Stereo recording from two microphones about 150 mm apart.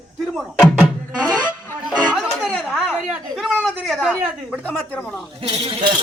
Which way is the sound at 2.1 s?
Centre (ahead or behind).